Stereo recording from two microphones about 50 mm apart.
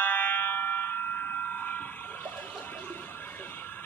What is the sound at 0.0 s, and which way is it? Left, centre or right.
Fire alarm, left.